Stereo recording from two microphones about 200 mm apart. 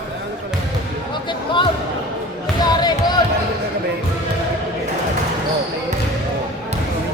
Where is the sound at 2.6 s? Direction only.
20° left (ahead or behind).